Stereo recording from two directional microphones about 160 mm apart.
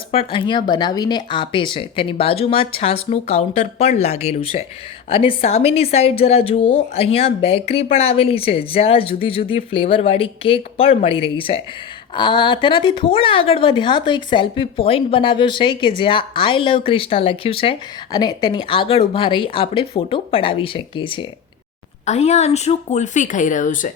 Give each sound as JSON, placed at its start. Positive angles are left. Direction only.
{"t": 0.1, "sound": "a woman's voice", "side_deg": 35}
{"t": 22.0, "sound": "speech", "side_deg": 45}